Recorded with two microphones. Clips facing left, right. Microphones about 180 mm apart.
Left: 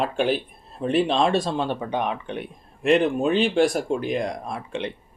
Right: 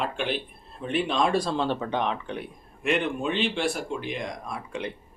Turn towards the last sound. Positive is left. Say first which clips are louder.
# left 4 dB
turn(degrees=25)  # may be behind; listen again after turning